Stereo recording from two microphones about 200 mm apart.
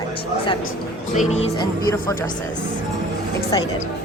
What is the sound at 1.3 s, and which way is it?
Speech, 30° left (ahead or behind).